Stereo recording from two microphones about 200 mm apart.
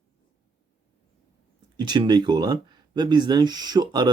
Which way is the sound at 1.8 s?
20° right (ahead or behind).